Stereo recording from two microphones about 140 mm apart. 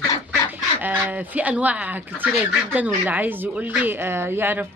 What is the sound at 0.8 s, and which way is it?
Speech, 15° right (ahead or behind).